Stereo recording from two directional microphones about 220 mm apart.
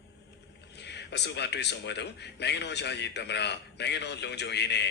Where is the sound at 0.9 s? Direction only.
50° left (ahead or behind).